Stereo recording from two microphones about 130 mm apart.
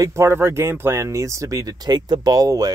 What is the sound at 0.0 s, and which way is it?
Speech, 20° right (ahead or behind).